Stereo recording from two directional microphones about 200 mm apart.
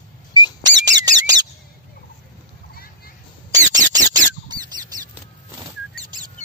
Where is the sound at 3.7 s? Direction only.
20° right (ahead or behind).